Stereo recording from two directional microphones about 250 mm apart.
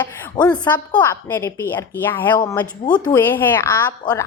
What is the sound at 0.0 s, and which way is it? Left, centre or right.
A woman's voice, centre.